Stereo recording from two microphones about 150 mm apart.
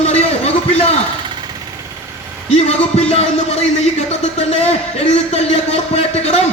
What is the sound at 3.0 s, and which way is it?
Music, 45° left (ahead or behind).